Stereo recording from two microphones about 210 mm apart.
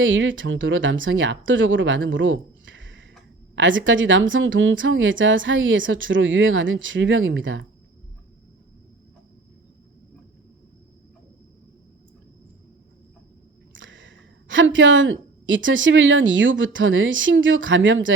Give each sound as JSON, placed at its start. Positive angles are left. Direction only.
{"t": 0.0, "sound": "speech", "side_deg": -65}
{"t": 13.7, "sound": "a woman's voice", "side_deg": -65}